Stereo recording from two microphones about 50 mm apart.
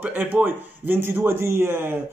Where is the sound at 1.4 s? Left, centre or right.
Right.